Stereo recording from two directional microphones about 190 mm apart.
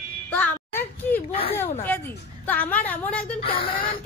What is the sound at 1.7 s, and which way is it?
Speech, 10° left (ahead or behind).